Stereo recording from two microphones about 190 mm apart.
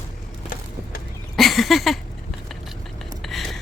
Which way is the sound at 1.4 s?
Centre (ahead or behind).